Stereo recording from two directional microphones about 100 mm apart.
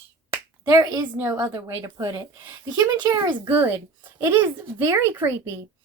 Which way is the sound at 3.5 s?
20° right (ahead or behind).